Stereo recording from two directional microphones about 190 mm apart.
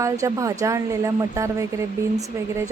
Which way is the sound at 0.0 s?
15° right (ahead or behind).